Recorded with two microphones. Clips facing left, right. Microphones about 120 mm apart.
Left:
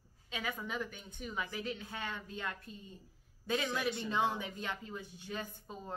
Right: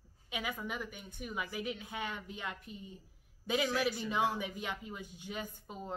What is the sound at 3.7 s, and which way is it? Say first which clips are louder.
Speech: right 2 dB; 20° left (ahead or behind).